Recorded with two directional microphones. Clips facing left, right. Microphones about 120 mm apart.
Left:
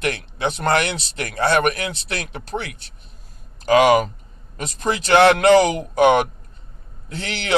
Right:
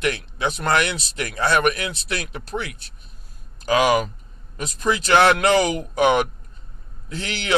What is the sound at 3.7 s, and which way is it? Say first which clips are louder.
Speech: left 4 dB; 25° left (ahead or behind).